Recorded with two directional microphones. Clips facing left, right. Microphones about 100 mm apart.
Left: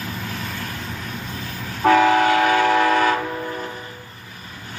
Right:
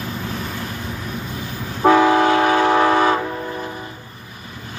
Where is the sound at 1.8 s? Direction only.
20° right (ahead or behind).